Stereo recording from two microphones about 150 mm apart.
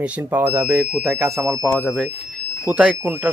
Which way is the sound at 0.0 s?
10° right (ahead or behind).